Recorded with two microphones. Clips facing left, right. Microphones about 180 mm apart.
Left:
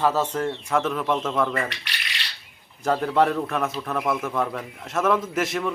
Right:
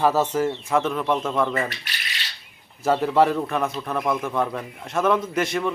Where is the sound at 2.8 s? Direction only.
5° right (ahead or behind).